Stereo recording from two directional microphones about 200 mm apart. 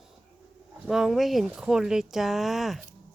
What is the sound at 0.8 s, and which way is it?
Speech, centre (ahead or behind).